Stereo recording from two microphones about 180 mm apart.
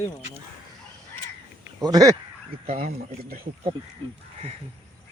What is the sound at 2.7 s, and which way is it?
Speech, 50° right (ahead or behind).